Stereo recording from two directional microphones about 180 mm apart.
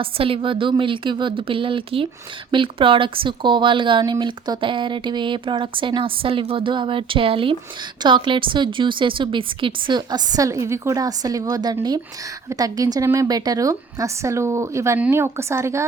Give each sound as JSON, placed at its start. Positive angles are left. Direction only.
{"t": 0.0, "sound": "a woman's voice", "side_deg": -30}